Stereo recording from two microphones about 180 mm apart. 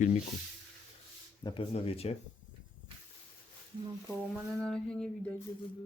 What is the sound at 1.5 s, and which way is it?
Speech, 30° left (ahead or behind).